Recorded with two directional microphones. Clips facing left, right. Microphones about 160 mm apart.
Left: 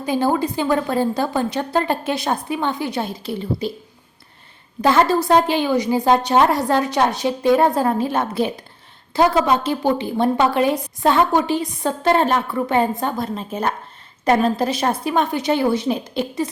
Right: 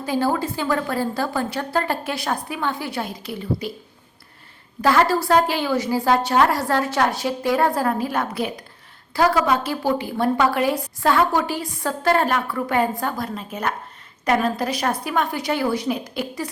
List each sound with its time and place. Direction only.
0.0 s a woman's voice: 20° left (ahead or behind)
4.8 s a woman's voice: 20° left (ahead or behind)